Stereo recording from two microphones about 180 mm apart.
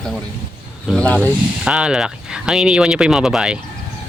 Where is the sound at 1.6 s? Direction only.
5° right (ahead or behind).